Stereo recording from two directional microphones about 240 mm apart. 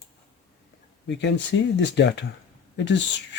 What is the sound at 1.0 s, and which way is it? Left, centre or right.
Speech, left.